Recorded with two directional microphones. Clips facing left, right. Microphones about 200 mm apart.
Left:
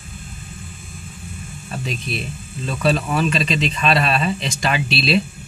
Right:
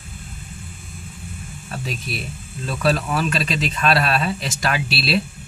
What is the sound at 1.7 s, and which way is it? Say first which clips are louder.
Speech: left 2 dB; 5° right (ahead or behind).